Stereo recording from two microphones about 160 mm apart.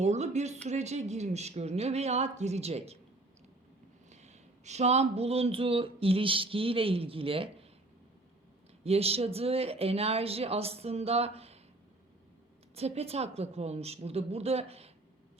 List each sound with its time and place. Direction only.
0.0 s speech: 45° right (ahead or behind)
4.1 s speech: 45° right (ahead or behind)
8.8 s speech: 40° right (ahead or behind)
12.7 s speech: 40° right (ahead or behind)